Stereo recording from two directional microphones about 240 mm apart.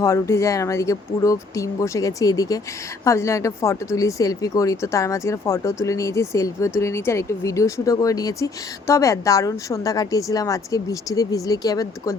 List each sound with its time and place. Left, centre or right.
0.0 s speech: centre